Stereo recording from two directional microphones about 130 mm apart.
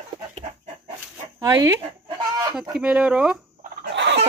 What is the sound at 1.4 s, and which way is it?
Speech, 25° right (ahead or behind).